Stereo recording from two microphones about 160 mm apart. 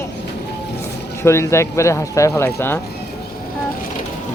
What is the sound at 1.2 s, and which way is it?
A man's voice, 15° left (ahead or behind).